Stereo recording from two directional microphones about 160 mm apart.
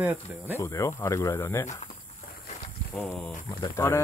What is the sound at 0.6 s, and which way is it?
Speech, 20° left (ahead or behind).